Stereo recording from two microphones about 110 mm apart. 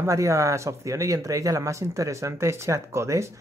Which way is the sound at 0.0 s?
30° right (ahead or behind).